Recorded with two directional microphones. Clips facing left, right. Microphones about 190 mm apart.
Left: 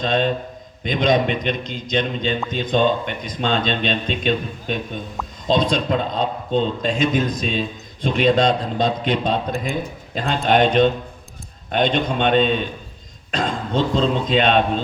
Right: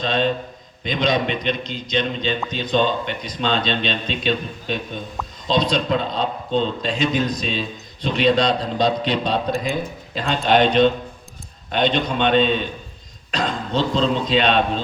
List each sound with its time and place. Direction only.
0.0 s speech: 50° left (ahead or behind)